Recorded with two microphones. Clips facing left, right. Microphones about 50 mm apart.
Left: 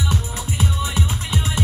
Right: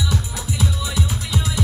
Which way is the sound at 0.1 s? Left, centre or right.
Left.